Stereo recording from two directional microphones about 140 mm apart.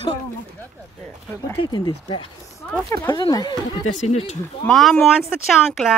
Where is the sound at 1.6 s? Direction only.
35° left (ahead or behind).